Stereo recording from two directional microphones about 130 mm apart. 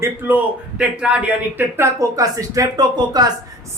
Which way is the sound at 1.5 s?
20° right (ahead or behind).